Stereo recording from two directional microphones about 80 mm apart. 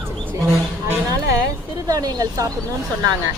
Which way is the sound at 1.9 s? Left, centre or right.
Right.